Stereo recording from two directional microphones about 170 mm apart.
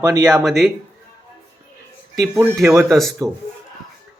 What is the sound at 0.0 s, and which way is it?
Speech, 20° right (ahead or behind).